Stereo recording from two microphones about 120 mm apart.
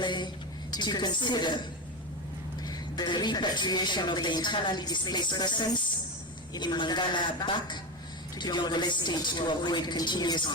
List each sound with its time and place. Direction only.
0.0 s a sound: 40° left (ahead or behind)
0.7 s speech: 35° left (ahead or behind)
2.6 s speech: 35° left (ahead or behind)